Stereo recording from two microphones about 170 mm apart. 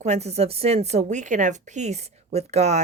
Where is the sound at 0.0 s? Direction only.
40° right (ahead or behind).